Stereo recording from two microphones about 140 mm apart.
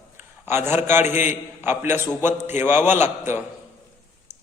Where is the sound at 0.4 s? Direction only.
15° right (ahead or behind).